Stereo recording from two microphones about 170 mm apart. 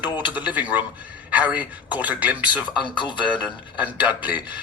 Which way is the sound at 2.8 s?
30° left (ahead or behind).